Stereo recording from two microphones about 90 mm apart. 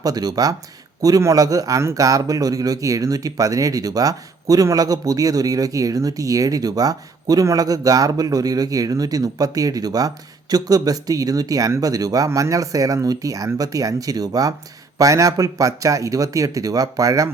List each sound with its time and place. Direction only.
0.0 s a man's voice: 45° right (ahead or behind)